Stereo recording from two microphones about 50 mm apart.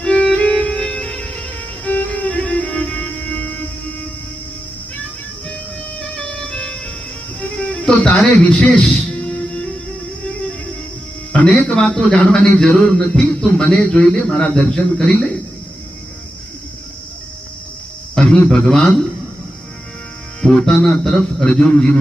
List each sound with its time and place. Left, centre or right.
0.0 s music: left
6.0 s music: centre
11.3 s speech: left
18.1 s a man's voice: centre
20.4 s speech: centre
21.7 s a man's voice: centre